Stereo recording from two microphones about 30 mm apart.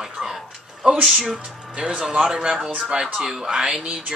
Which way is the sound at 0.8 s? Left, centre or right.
Right.